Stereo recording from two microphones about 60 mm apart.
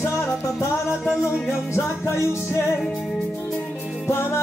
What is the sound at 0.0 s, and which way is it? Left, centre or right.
Music, left.